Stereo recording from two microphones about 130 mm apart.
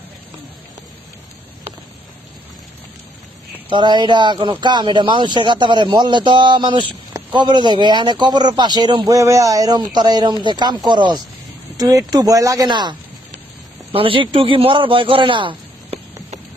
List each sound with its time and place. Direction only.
3.7 s a man's voice: 35° right (ahead or behind)